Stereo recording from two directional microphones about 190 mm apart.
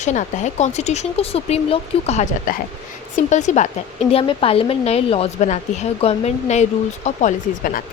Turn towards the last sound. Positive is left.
turn(degrees=45)  # may be behind; listen again after turning